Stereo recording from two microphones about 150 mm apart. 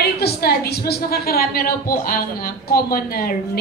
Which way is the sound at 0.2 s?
90° left.